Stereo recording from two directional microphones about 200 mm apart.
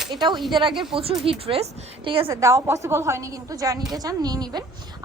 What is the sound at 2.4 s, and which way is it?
A woman's voice, 15° right (ahead or behind).